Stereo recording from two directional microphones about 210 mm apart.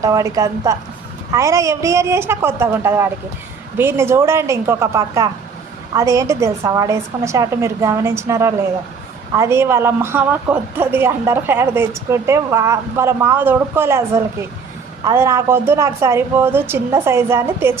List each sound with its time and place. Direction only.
0.0 s a woman's voice: 15° right (ahead or behind)
15.0 s a woman's voice: 15° right (ahead or behind)